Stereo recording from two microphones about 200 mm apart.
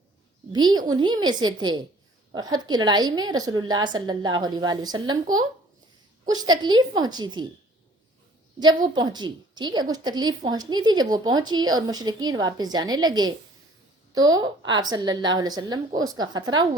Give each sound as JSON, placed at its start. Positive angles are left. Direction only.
{"t": 0.5, "sound": "a woman's voice", "side_deg": -20}
{"t": 6.2, "sound": "a woman's voice", "side_deg": -20}
{"t": 8.5, "sound": "a woman's voice", "side_deg": -20}